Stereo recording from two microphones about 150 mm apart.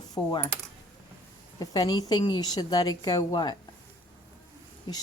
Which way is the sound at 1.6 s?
25° left (ahead or behind).